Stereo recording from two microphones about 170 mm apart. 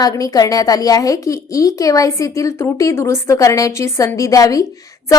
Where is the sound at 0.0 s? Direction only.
20° left (ahead or behind).